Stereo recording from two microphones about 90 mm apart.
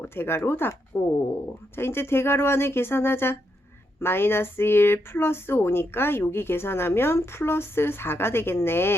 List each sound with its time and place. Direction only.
0.0 s speech: 25° left (ahead or behind)